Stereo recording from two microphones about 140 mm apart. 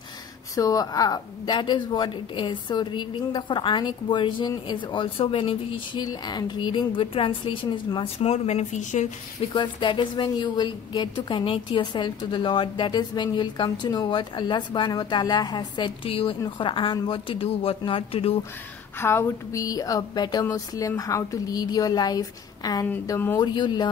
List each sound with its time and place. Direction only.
0.6 s a woman's voice: 25° left (ahead or behind); by 9.5 s 55° left (ahead or behind)
9.5 s a woman's voice: 35° left (ahead or behind)
18.9 s speech: 15° left (ahead or behind)
23.4 s a woman's voice: 30° left (ahead or behind)